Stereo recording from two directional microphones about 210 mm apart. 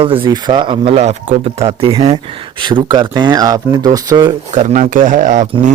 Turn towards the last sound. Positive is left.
turn(degrees=-40)  # may be behind; listen again after turning